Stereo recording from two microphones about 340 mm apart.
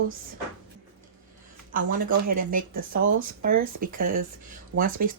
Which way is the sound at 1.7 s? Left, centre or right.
Right.